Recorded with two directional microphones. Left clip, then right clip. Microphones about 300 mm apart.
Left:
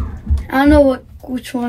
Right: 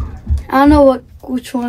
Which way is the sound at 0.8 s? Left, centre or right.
Right.